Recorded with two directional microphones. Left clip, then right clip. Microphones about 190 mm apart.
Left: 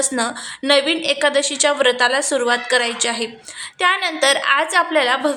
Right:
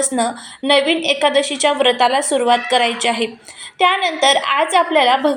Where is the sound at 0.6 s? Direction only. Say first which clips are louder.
Right 2 dB; 5° left (ahead or behind).